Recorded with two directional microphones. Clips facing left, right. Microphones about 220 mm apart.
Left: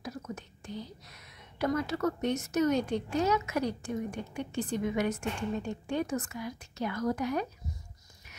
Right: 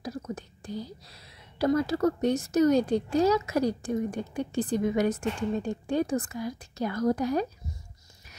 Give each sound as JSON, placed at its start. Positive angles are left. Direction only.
{"t": 0.0, "sound": "speech", "side_deg": -35}